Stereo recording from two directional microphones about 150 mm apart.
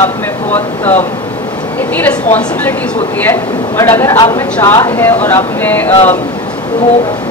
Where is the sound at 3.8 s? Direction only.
15° left (ahead or behind).